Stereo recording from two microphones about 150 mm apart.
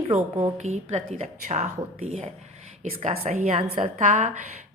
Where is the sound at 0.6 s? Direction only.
50° right (ahead or behind).